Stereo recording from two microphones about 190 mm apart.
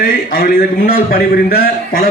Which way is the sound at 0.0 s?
50° left (ahead or behind).